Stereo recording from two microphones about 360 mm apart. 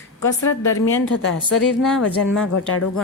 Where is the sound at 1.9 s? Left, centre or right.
Left.